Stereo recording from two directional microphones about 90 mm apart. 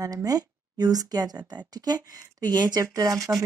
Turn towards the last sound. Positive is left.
turn(degrees=-40)  # may be behind; listen again after turning